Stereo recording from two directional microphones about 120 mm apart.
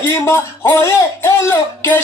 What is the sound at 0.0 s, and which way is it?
Speech, 20° left (ahead or behind).